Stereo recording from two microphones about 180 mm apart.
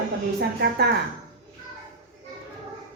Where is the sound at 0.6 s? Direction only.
65° right (ahead or behind).